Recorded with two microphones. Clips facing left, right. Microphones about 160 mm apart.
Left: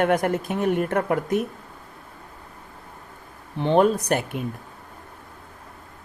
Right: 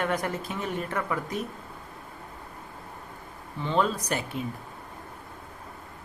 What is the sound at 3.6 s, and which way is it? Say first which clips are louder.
Speech: left 8 dB; 60° left (ahead or behind).